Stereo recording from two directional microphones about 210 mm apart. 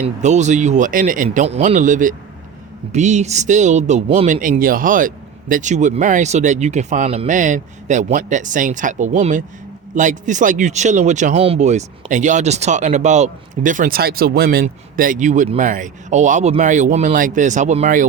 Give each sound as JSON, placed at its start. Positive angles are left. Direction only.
{"t": 0.0, "sound": "speech", "side_deg": -35}